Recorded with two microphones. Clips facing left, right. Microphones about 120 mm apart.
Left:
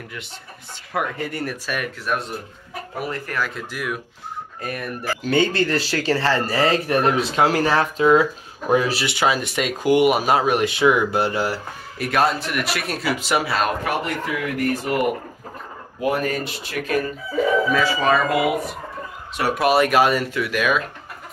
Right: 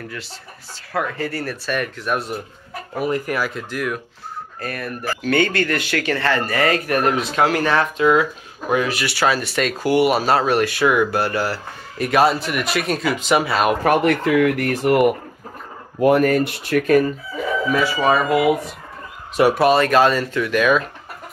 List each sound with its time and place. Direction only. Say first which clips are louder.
0.9 s speech: right 2 dB; 20° left (ahead or behind)
3.1 s speech: right 6 dB; 10° right (ahead or behind)
3.7 s speech: right 5 dB; 5° left (ahead or behind)
4.6 s speech: right 1 dB; 15° left (ahead or behind); by 9.0 s 35° left (ahead or behind)
9.0 s speech: right 1 dB; 15° left (ahead or behind)
12.0 s speech: right 4 dB; centre (ahead or behind)
13.8 s speech: right 8 dB; 80° right
16.0 s speech: right 8 dB; 55° right (ahead or behind)
17.7 s speech: right 1 dB; 15° right (ahead or behind)
19.5 s speech: left 1 dB; centre (ahead or behind)
19.8 s speech: right 1 dB; 10° left (ahead or behind)